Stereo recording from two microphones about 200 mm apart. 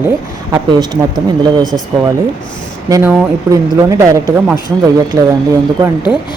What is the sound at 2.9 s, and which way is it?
Speech, 15° right (ahead or behind).